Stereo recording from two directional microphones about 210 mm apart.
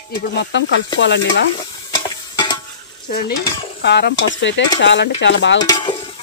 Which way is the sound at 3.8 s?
50° left (ahead or behind).